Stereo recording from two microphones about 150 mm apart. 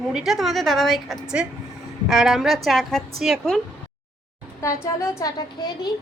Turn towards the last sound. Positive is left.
turn(degrees=25)  # may be behind; listen again after turning